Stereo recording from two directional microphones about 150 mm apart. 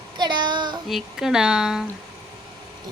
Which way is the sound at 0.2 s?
30° right (ahead or behind).